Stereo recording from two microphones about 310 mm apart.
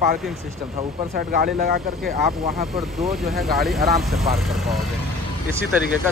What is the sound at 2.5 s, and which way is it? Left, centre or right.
Speech, centre.